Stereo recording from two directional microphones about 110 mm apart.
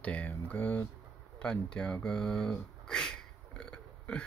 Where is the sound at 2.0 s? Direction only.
5° left (ahead or behind).